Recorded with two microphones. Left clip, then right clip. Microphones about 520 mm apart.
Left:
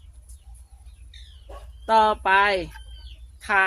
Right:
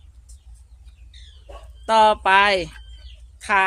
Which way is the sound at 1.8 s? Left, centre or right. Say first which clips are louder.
Right 3 dB; left.